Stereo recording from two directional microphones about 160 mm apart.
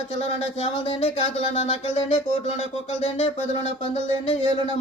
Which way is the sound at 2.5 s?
40° left (ahead or behind).